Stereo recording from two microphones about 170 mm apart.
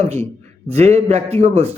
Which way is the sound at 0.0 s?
40° right (ahead or behind).